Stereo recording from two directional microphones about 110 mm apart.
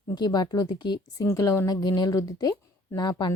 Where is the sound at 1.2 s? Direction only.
30° left (ahead or behind).